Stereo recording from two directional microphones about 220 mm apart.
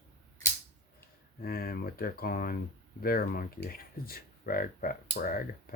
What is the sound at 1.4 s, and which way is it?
Speech, 40° left (ahead or behind).